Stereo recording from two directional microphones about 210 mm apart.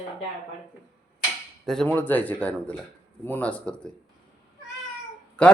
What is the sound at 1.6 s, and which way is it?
Speech, centre (ahead or behind).